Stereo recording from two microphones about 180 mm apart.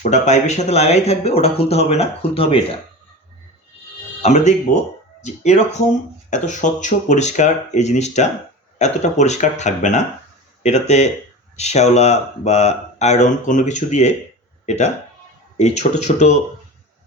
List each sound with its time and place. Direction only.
0.0 s speech: 40° left (ahead or behind)
4.2 s speech: 40° left (ahead or behind)
15.5 s speech: 40° left (ahead or behind)